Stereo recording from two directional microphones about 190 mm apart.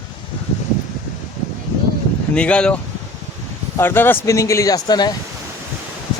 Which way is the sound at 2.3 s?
5° left (ahead or behind).